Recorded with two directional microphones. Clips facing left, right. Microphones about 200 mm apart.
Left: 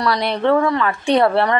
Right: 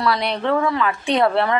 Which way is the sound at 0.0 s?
Centre (ahead or behind).